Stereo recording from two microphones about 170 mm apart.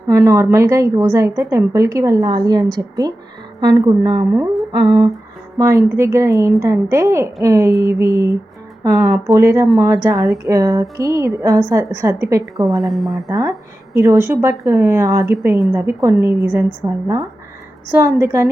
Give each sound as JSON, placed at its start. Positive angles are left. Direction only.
{"t": 0.1, "sound": "a woman's voice", "side_deg": -15}
{"t": 5.5, "sound": "a woman's voice", "side_deg": -20}
{"t": 12.8, "sound": "speech", "side_deg": 0}
{"t": 13.2, "sound": "a woman's voice", "side_deg": -20}